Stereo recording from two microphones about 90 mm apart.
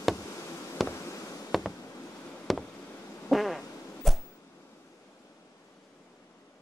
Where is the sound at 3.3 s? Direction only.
Centre (ahead or behind).